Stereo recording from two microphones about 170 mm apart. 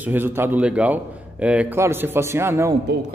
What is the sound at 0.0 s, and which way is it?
A man's voice, 10° right (ahead or behind).